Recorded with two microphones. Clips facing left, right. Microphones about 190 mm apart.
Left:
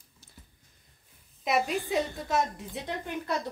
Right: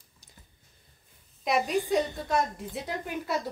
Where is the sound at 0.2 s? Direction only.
15° right (ahead or behind).